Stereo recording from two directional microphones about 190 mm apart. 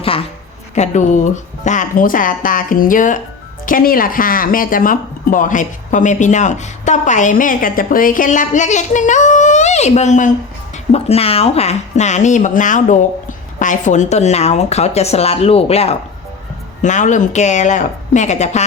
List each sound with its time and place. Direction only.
0.8 s speech: 40° left (ahead or behind)